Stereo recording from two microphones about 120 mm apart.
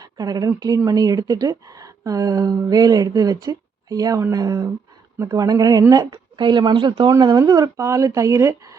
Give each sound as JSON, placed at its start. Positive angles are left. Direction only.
{"t": 0.0, "sound": "speech", "side_deg": -30}